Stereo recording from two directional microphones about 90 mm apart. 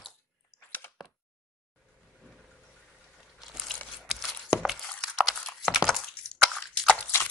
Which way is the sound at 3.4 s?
Centre (ahead or behind).